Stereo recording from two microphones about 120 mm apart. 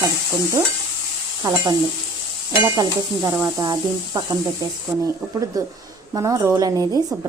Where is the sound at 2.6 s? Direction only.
30° right (ahead or behind).